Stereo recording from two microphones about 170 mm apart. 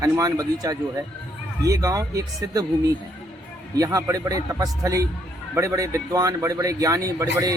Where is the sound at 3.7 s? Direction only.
20° right (ahead or behind).